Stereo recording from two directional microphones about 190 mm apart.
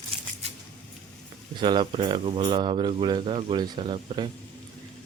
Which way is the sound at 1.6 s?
25° right (ahead or behind).